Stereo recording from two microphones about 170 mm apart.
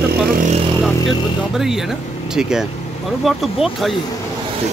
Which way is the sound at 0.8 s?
Centre (ahead or behind).